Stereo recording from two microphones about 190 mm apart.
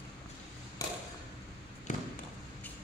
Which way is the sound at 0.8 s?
20° left (ahead or behind).